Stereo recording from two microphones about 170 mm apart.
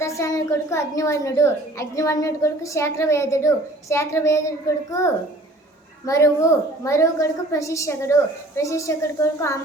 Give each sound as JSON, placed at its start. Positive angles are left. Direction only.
{"t": 0.0, "sound": "a woman's voice", "side_deg": 15}